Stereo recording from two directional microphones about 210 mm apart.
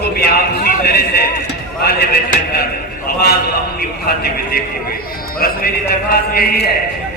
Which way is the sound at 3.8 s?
45° left (ahead or behind).